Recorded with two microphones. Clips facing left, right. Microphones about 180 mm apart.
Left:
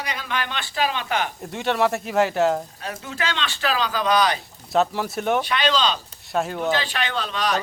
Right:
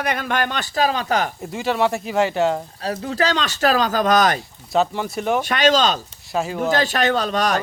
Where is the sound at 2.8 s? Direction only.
35° right (ahead or behind).